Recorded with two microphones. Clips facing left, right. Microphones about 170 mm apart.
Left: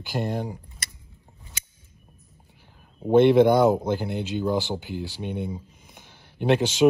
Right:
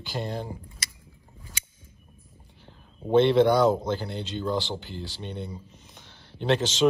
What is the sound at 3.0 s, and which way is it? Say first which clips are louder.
Speech: left 3 dB; 10° left (ahead or behind).